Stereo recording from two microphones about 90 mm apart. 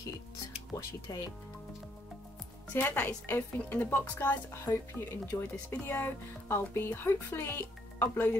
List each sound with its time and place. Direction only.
1.1 s speech: 40° left (ahead or behind)
2.7 s speech: 20° left (ahead or behind)